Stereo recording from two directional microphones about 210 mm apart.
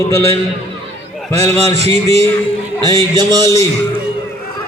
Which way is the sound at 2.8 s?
20° right (ahead or behind).